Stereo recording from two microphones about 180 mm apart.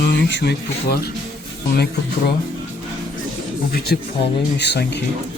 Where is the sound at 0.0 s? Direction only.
75° left (ahead or behind).